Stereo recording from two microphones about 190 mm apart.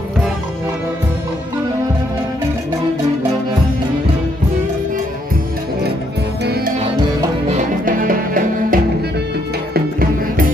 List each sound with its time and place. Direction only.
6.4 s music: 55° right (ahead or behind)
7.4 s music: 40° right (ahead or behind)